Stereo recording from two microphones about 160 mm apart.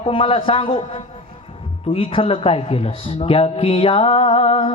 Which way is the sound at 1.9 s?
35° left (ahead or behind).